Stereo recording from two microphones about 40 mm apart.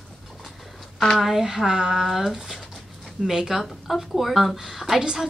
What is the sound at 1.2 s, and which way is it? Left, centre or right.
Speech, centre.